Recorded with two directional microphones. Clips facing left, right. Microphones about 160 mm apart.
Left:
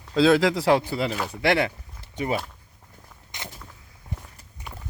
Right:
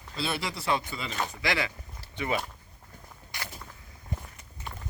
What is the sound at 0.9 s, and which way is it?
Speech, 70° left (ahead or behind).